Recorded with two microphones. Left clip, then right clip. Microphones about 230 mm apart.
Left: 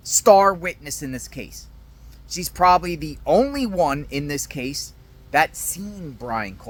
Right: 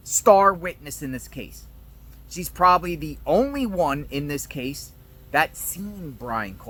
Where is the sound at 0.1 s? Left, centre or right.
Centre.